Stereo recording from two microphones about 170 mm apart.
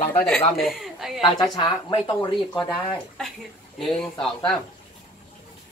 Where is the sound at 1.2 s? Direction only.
25° left (ahead or behind).